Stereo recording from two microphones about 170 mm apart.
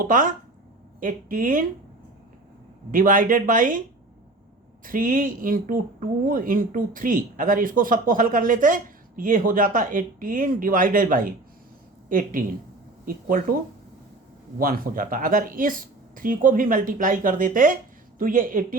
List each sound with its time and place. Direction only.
0.0 s speech: 50° right (ahead or behind)
2.9 s speech: 50° right (ahead or behind)
4.9 s speech: 55° right (ahead or behind)
14.6 s speech: 55° right (ahead or behind)